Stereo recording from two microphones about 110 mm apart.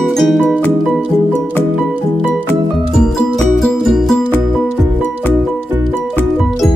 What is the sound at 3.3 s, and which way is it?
Music, centre (ahead or behind).